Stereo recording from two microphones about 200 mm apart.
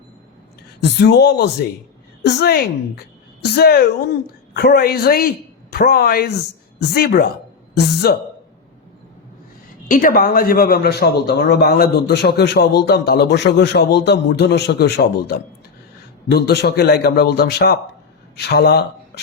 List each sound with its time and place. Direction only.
0.8 s a man's voice: 60° left (ahead or behind)
9.9 s a man's voice: 45° left (ahead or behind)